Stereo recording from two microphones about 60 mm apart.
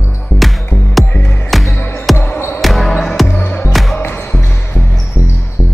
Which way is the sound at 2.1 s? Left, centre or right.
Left.